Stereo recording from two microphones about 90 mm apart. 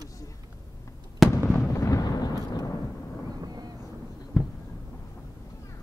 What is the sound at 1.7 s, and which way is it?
Thunder, 35° left (ahead or behind).